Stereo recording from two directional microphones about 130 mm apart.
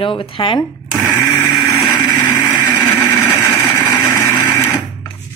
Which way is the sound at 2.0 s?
30° left (ahead or behind).